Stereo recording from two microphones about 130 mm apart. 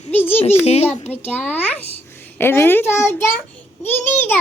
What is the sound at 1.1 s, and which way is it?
A child's voice, 10° left (ahead or behind).